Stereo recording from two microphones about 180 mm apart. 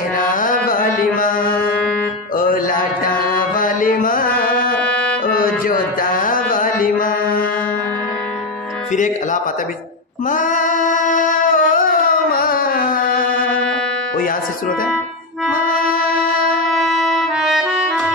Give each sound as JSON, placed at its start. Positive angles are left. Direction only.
{"t": 0.3, "sound": "music", "side_deg": 50}
{"t": 4.7, "sound": "music", "side_deg": 5}
{"t": 5.2, "sound": "music", "side_deg": 50}
{"t": 8.9, "sound": "speech", "side_deg": 45}
{"t": 10.3, "sound": "singing", "side_deg": 45}
{"t": 15.5, "sound": "wind instrument", "side_deg": 55}
{"t": 16.7, "sound": "music", "side_deg": 0}